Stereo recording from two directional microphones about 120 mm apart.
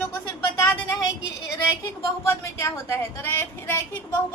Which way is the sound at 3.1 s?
20° left (ahead or behind).